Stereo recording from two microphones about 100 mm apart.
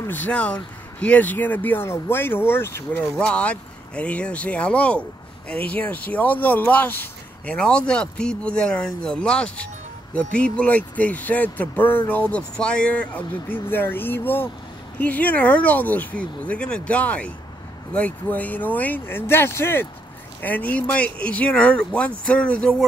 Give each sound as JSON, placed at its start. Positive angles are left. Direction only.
{"t": 0.1, "sound": "speech", "side_deg": 15}
{"t": 3.2, "sound": "speech", "side_deg": 10}